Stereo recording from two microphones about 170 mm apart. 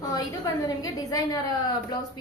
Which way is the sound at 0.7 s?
20° left (ahead or behind).